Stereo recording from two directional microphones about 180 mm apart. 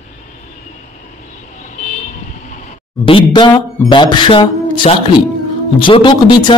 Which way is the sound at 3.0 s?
30° left (ahead or behind).